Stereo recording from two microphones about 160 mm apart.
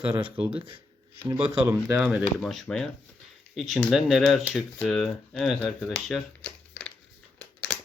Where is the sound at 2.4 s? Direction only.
Centre (ahead or behind).